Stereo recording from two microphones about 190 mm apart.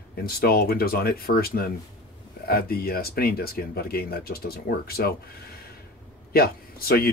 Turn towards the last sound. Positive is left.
turn(degrees=55)  # may be behind; listen again after turning